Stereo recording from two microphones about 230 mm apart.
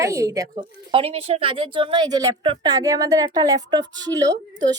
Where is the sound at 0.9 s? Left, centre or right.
Right.